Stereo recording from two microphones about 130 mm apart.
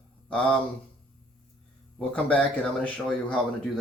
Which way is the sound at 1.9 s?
10° left (ahead or behind).